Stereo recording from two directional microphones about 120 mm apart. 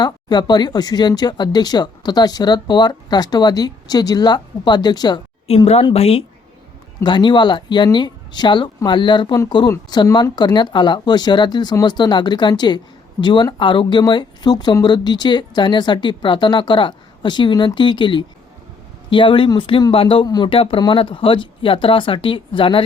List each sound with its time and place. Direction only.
0.0 s speech: 35° left (ahead or behind)
5.5 s speech: 55° left (ahead or behind)
7.0 s speech: 40° left (ahead or behind)
20.2 s speech: 35° left (ahead or behind)
20.5 s speech: 50° left (ahead or behind)